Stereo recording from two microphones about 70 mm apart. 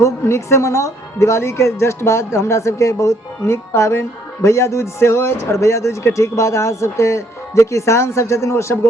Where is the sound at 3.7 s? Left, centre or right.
Left.